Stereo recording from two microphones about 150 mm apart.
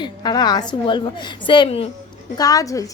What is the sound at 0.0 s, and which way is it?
A woman's voice, 30° left (ahead or behind).